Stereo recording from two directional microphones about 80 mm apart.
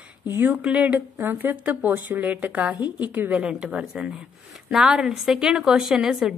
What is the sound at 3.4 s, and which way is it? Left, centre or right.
A woman's voice, centre.